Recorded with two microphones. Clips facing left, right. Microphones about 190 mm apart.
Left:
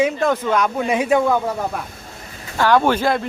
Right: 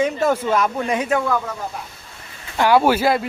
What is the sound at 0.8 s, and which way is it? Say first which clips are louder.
Speech: left 3 dB; 10° left (ahead or behind).